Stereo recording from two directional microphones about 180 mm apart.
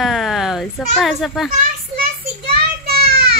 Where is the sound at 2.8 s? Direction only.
60° right (ahead or behind).